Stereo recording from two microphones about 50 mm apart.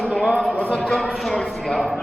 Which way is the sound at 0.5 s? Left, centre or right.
Left.